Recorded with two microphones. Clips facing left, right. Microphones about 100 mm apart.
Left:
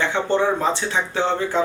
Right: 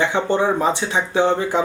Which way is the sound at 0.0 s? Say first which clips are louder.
Right 1 dB; 15° right (ahead or behind).